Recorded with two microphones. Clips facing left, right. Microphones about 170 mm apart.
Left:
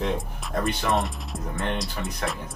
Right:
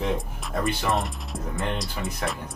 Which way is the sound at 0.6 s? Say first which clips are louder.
Left 1 dB; centre (ahead or behind).